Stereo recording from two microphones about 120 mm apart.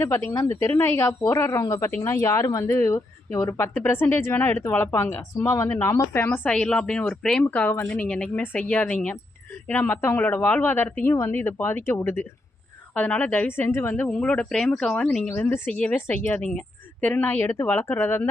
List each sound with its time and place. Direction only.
0.3 s speech: 20° left (ahead or behind); by 15.4 s 5° left (ahead or behind)
15.4 s speech: 20° left (ahead or behind)